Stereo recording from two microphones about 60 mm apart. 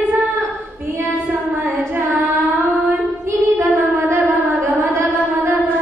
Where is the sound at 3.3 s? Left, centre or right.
Right.